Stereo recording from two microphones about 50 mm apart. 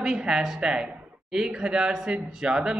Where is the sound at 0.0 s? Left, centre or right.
Centre.